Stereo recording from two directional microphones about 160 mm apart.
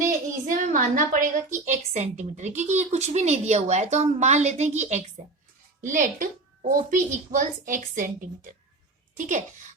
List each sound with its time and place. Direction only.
0.4 s a woman's voice: 55° right (ahead or behind)
9.1 s a woman's voice: 55° right (ahead or behind)